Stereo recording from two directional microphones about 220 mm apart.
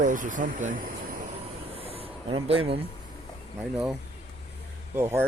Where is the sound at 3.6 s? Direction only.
5° right (ahead or behind).